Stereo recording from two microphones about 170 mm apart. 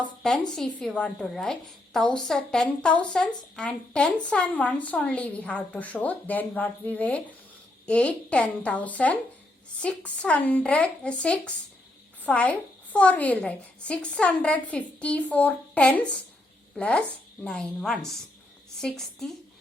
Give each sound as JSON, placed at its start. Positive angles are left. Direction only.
{"t": 0.0, "sound": "a woman's voice", "side_deg": 5}